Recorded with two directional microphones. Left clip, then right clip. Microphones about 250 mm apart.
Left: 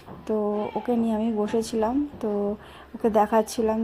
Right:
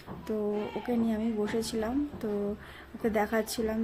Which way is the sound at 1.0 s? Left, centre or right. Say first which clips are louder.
Left 6 dB; centre.